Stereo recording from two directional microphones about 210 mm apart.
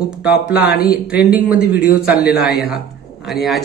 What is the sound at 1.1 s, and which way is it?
Speech, 5° right (ahead or behind).